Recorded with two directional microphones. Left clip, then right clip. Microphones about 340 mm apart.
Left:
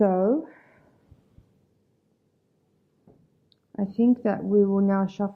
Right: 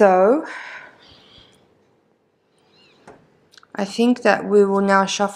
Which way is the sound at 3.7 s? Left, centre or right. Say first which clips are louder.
Right 5 dB; centre.